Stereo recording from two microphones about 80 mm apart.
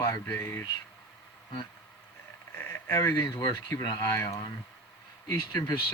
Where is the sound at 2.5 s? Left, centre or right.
Left.